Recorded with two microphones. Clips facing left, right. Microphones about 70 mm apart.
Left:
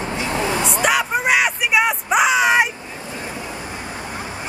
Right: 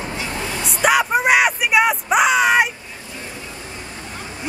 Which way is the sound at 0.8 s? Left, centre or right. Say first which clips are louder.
Right 5 dB; centre.